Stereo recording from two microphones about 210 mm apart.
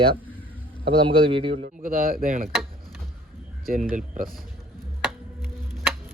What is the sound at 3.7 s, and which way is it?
Speech, 35° right (ahead or behind).